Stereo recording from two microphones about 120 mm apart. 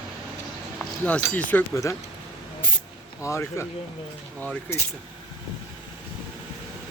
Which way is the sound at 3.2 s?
25° left (ahead or behind).